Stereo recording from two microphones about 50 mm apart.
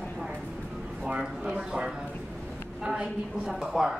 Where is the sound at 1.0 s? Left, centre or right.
Right.